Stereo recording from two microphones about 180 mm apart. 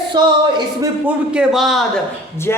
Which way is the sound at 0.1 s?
20° right (ahead or behind).